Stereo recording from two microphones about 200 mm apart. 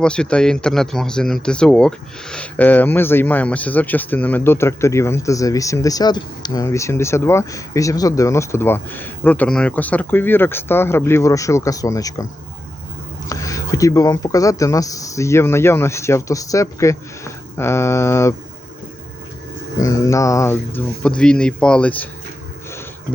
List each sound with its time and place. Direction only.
0.0 s speech: 5° left (ahead or behind)
13.2 s speech: 15° left (ahead or behind)
19.8 s speech: 15° left (ahead or behind)